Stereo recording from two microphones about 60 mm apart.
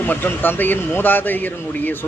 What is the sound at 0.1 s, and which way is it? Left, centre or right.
Speech, left.